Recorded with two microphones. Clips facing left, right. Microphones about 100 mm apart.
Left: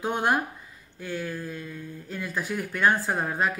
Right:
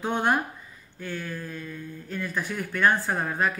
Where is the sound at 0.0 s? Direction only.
10° left (ahead or behind).